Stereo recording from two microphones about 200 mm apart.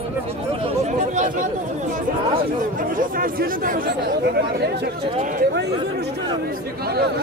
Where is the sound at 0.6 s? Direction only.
35° right (ahead or behind).